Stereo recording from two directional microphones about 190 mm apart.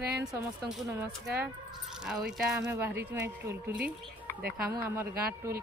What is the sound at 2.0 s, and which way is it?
Speech, 5° right (ahead or behind).